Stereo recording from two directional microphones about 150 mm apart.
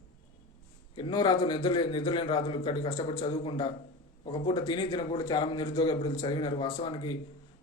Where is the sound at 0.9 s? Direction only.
30° left (ahead or behind).